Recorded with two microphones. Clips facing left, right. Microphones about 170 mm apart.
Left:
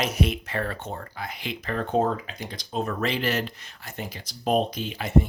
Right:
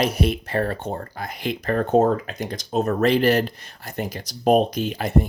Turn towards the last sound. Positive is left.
turn(degrees=-40)  # may be behind; listen again after turning